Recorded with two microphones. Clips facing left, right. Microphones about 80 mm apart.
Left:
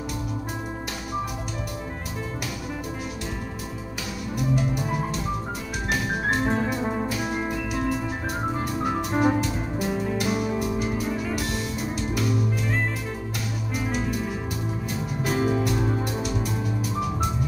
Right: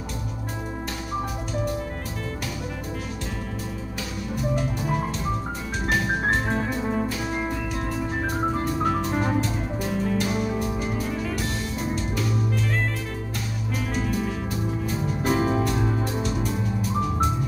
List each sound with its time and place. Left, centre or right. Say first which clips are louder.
6.4 s music: left 1 dB; centre
8.8 s organ: left 3 dB; centre
9.8 s music: right 1 dB; centre
15.2 s music: right 1 dB; right
15.6 s music: even; centre